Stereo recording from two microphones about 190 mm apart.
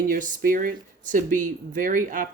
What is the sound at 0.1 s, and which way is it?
Speech, 45° right (ahead or behind).